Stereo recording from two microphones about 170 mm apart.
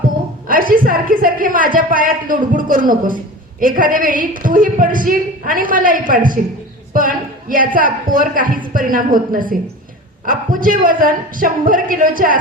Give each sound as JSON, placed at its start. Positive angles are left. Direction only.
{"t": 0.4, "sound": "a woman's voice", "side_deg": -55}